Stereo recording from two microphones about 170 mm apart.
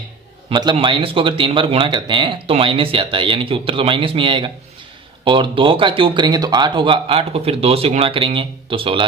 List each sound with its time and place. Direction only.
0.5 s speech: 25° right (ahead or behind)